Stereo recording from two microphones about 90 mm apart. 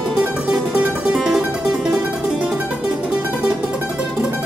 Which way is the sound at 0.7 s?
5° right (ahead or behind).